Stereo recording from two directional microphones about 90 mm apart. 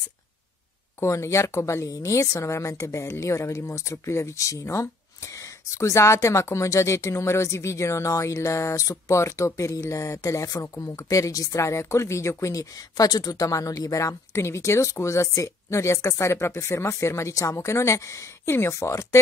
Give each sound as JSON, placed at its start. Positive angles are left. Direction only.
{"t": 1.0, "sound": "speech", "side_deg": 35}